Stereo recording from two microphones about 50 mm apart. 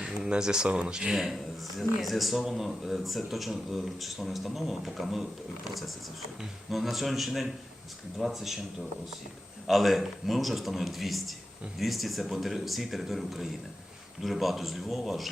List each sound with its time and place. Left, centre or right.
0.0 s speech: centre
1.1 s speech: centre
6.4 s speech: centre